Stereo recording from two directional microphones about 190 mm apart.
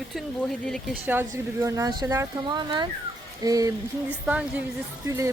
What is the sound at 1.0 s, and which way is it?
A woman's voice, 15° right (ahead or behind).